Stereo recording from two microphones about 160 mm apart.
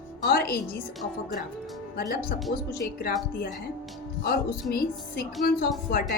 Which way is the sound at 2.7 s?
80° left.